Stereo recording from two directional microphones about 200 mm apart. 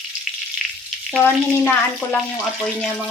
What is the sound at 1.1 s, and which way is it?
Speech, 5° left (ahead or behind).